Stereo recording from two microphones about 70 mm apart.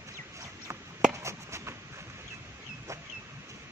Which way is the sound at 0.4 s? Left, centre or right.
Right.